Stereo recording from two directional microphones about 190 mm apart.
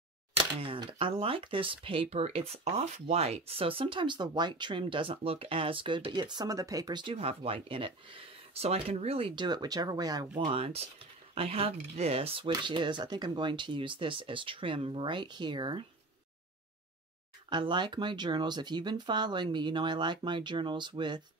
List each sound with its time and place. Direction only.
0.4 s a sound: 30° right (ahead or behind)
1.2 s speech: 30° right (ahead or behind)
17.5 s speech: 25° right (ahead or behind)